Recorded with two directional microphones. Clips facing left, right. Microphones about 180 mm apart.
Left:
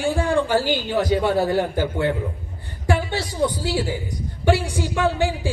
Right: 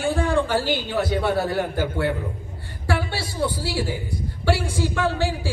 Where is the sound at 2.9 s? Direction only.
20° left (ahead or behind).